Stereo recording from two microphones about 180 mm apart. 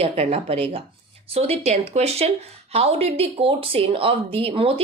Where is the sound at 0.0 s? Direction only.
35° right (ahead or behind).